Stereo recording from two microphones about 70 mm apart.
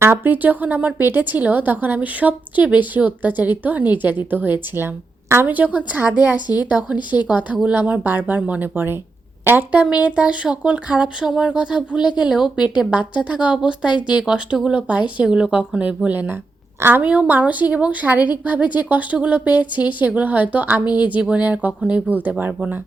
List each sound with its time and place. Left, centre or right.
0.0 s a woman's voice: right
9.8 s speech: centre
16.0 s a woman's voice: right